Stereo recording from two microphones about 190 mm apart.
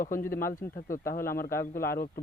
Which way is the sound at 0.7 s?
45° left (ahead or behind).